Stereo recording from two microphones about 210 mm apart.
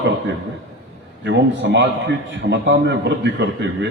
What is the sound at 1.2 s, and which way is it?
A man's voice, 60° right (ahead or behind).